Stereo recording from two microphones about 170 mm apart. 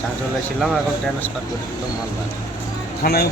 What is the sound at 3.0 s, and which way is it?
Speech, 65° left (ahead or behind).